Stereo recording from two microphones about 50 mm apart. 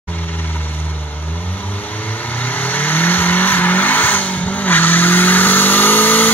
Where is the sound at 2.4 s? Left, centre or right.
Left.